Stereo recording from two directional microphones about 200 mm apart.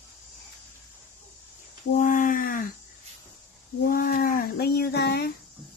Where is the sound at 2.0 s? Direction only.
45° left (ahead or behind).